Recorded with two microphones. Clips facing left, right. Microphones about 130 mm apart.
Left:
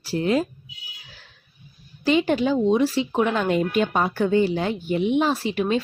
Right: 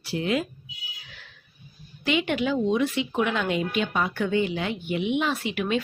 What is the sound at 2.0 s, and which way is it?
Speech, 35° left (ahead or behind).